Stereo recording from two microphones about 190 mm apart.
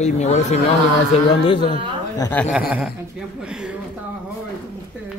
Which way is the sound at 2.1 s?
15° left (ahead or behind).